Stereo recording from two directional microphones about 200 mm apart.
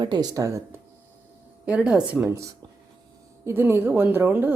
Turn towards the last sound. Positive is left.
turn(degrees=-10)  # may be behind; listen again after turning